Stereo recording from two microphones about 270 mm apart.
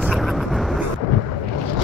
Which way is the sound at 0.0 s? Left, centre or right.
Centre.